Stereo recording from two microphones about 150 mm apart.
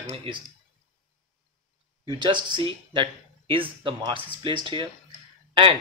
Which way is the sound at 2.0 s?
30° right (ahead or behind).